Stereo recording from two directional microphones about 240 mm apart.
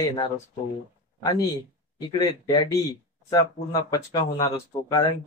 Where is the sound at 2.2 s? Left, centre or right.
Centre.